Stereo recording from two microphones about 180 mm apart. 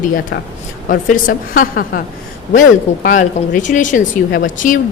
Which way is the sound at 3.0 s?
45° left (ahead or behind).